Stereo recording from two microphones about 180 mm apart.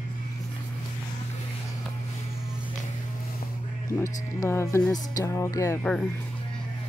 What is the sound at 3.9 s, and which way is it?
Speech, 15° left (ahead or behind).